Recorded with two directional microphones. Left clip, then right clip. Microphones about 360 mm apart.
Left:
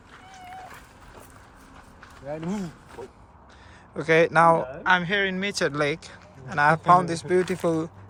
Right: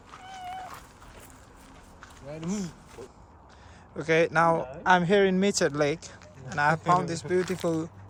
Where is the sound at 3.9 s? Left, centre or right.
Centre.